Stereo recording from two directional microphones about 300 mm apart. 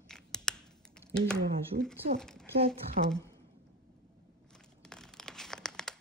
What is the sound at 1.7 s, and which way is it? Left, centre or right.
Speech, right.